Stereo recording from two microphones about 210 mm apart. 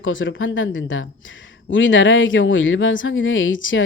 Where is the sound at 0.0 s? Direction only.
65° left (ahead or behind).